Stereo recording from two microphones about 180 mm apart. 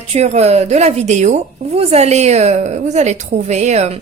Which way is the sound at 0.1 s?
40° right (ahead or behind).